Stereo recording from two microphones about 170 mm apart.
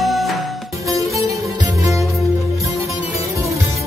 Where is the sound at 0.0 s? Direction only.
Centre (ahead or behind).